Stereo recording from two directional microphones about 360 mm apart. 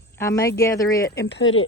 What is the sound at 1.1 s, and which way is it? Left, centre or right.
Speech, left.